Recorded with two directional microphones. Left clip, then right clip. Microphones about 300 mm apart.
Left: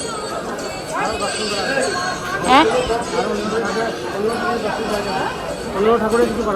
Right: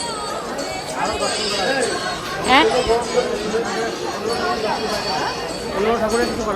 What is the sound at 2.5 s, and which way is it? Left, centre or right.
Speech, centre.